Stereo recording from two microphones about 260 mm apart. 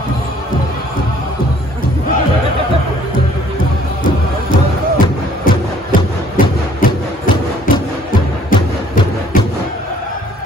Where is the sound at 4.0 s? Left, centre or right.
Left.